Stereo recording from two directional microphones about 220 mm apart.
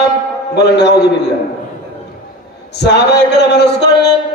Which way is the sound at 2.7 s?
50° left (ahead or behind).